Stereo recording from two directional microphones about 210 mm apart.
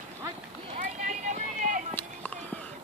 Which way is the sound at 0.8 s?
35° right (ahead or behind).